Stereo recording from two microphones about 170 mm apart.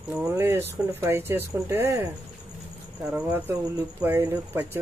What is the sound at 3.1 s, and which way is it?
Speech, 10° right (ahead or behind).